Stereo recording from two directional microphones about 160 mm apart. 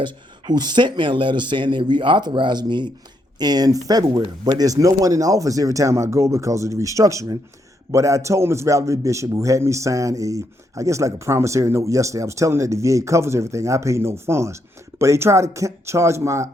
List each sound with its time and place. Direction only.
0.0 s a man's voice: 25° right (ahead or behind)